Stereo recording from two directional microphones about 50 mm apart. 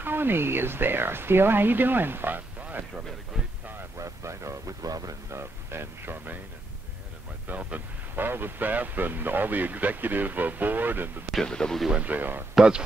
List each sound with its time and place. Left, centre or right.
0.0 s speech: right
3.3 s a sound: centre
4.0 s speech: right
5.4 s speech: right
7.4 s speech: right
8.2 s speech: right
11.4 s speech: centre
11.9 s speech: right